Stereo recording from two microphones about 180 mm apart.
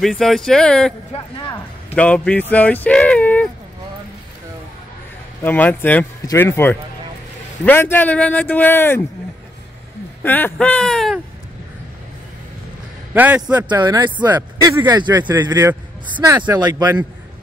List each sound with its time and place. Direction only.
0.0 s speech: centre (ahead or behind)
2.0 s speech: 5° left (ahead or behind)
5.4 s speech: 10° left (ahead or behind)
10.2 s speech: 10° left (ahead or behind)
13.1 s a man's voice: 10° right (ahead or behind)
13.5 s speech: 25° right (ahead or behind)
15.3 s a man's voice: 10° right (ahead or behind)
16.3 s speech: 20° right (ahead or behind)